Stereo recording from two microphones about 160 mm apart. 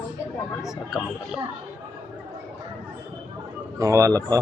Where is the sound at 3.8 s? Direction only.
20° right (ahead or behind).